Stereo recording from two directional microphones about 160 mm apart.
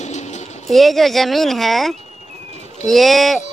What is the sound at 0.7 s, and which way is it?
Speech, centre (ahead or behind).